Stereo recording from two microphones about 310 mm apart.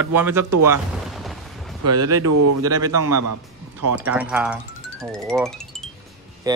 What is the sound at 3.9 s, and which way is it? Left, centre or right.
Speech, centre.